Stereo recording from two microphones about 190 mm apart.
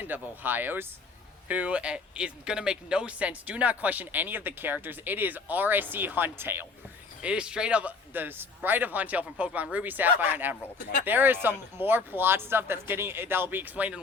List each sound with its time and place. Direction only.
0.0 s speech: 10° right (ahead or behind)
10.8 s speech: 50° left (ahead or behind)
11.0 s speech: 10° right (ahead or behind)